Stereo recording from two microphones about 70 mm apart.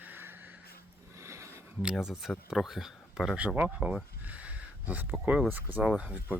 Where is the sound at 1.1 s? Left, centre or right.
Right.